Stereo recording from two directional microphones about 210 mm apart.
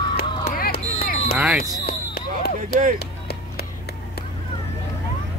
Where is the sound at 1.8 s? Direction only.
50° left (ahead or behind).